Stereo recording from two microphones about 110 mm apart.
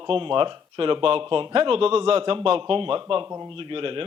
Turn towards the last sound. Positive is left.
turn(degrees=-55)  # may be behind; listen again after turning